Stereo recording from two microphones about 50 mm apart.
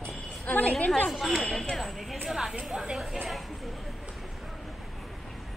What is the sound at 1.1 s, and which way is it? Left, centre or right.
Chatter, centre.